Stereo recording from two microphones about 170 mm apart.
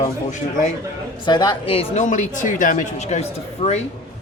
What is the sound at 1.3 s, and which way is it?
A woman's voice, 25° left (ahead or behind).